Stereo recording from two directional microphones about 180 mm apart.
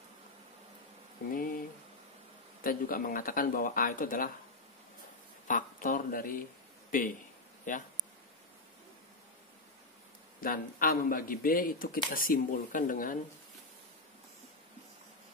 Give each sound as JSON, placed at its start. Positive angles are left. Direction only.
{"t": 2.6, "sound": "speech", "side_deg": 50}
{"t": 5.5, "sound": "speech", "side_deg": 50}
{"t": 10.4, "sound": "speech", "side_deg": 50}